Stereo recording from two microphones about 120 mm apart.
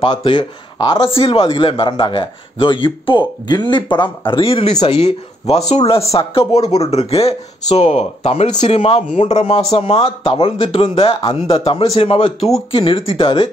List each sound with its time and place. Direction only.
0.0 s speech: 45° left (ahead or behind)
4.3 s speech: 50° left (ahead or behind)
5.9 s speech: 55° left (ahead or behind)